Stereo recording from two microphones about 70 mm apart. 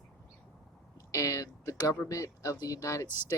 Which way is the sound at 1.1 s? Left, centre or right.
Left.